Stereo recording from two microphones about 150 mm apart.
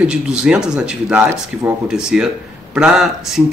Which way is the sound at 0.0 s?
5° right (ahead or behind).